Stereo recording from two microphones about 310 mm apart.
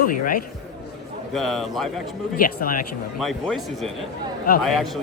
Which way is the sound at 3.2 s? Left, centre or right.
Centre.